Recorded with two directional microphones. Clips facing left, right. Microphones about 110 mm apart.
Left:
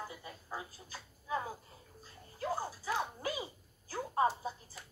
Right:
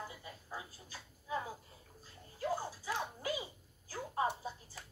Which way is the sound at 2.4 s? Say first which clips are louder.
Left 1 dB; 35° left (ahead or behind).